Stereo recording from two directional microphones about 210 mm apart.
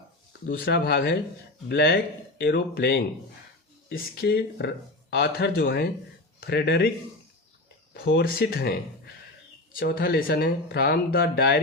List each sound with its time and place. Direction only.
0.4 s speech: 50° left (ahead or behind)
7.9 s speech: 60° left (ahead or behind)
9.7 s speech: 45° left (ahead or behind)